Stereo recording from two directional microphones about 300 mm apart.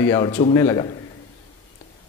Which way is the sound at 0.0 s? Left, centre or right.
Centre.